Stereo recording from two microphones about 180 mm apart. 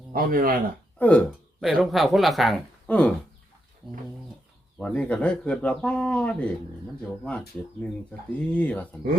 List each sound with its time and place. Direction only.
0.1 s speech: 50° right (ahead or behind)
0.9 s speech: 5° left (ahead or behind)
4.8 s speech: 5° left (ahead or behind)